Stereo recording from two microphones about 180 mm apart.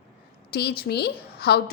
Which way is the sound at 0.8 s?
60° left (ahead or behind).